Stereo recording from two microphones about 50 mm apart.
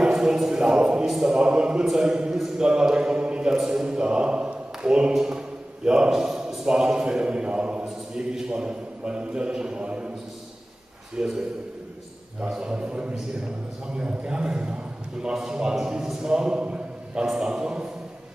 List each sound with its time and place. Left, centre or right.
0.0 s a man's voice: centre
1.0 s a man's voice: centre
1.3 s a man's voice: centre
3.5 s a man's voice: centre
3.8 s a man's voice: centre
11.1 s a man's voice: centre
16.6 s a sound: centre
17.3 s a man's voice: centre